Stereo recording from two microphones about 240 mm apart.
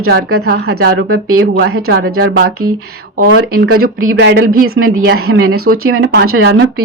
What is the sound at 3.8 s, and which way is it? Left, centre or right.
Speech, right.